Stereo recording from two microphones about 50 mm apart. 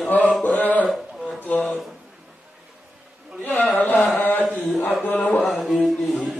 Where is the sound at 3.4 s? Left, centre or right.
Left.